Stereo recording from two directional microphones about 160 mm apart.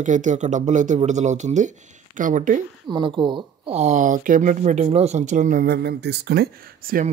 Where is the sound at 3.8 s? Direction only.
50° right (ahead or behind).